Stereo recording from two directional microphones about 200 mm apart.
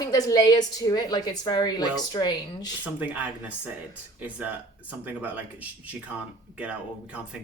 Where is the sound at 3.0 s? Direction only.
10° right (ahead or behind).